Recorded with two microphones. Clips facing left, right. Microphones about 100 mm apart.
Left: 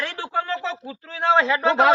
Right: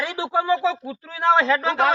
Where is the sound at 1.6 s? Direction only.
20° left (ahead or behind).